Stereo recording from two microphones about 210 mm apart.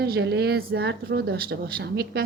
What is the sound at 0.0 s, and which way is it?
Speech, 50° right (ahead or behind).